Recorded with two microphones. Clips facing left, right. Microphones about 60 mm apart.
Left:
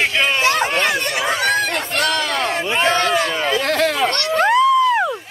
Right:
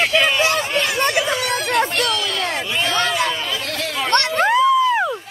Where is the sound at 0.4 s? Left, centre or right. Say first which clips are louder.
Left 2 dB; left.